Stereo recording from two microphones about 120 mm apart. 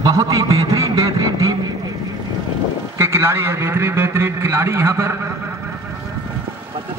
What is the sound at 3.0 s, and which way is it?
A man's voice, 20° right (ahead or behind).